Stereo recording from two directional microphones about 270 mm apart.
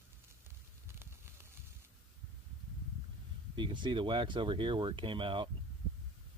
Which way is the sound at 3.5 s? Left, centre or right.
Centre.